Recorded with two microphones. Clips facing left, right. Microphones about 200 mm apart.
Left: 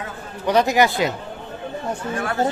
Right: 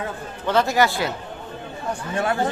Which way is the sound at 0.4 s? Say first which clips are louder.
Left 2 dB; 15° left (ahead or behind).